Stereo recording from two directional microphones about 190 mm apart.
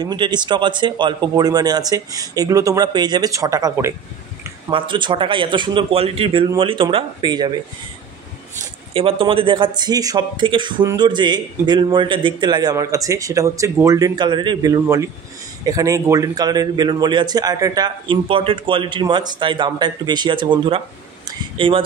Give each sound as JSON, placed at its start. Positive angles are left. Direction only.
{"t": 0.0, "sound": "a man's voice", "side_deg": -20}
{"t": 8.9, "sound": "a man's voice", "side_deg": -30}